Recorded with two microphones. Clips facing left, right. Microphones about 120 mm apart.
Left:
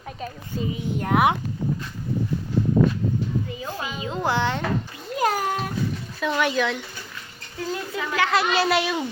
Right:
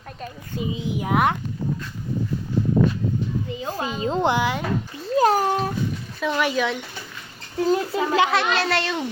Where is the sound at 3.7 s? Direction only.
35° right (ahead or behind).